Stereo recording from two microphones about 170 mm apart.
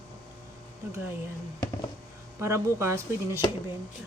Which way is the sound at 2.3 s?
15° right (ahead or behind).